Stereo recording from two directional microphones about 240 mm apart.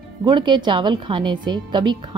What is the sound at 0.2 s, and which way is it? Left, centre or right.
A woman's voice, centre.